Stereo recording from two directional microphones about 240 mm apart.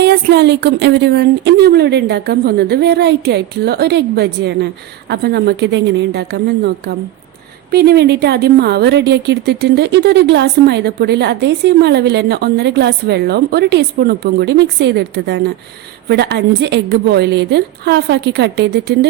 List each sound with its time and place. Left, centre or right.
0.0 s a woman's voice: right
7.7 s a woman's voice: right